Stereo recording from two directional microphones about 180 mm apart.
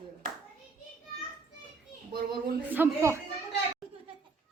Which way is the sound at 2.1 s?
50° right (ahead or behind).